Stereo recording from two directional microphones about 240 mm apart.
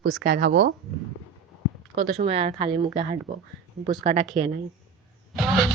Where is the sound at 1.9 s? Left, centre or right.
Right.